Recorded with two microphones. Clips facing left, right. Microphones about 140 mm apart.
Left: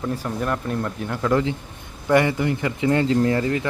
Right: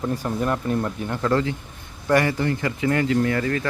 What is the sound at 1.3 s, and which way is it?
Speech, 20° left (ahead or behind).